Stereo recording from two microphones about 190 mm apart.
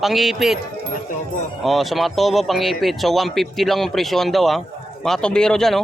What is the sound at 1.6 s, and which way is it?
Speech, centre (ahead or behind).